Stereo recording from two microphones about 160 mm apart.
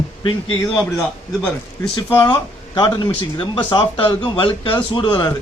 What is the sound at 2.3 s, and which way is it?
Speech, 25° left (ahead or behind).